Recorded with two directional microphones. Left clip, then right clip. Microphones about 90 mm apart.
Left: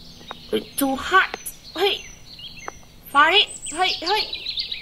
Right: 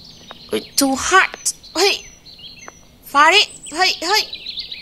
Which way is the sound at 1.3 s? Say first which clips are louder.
Right 7 dB; 30° right (ahead or behind).